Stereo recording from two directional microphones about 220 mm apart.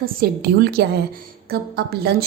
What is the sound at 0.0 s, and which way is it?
A woman's voice, 45° right (ahead or behind).